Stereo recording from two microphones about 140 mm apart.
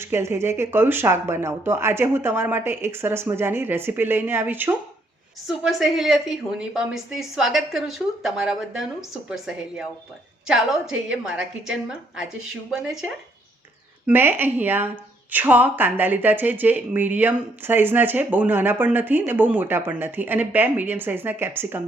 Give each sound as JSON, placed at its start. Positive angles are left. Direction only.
{"t": 0.0, "sound": "a woman's voice", "side_deg": -15}
{"t": 5.5, "sound": "a woman's voice", "side_deg": -5}
{"t": 14.1, "sound": "a woman's voice", "side_deg": -15}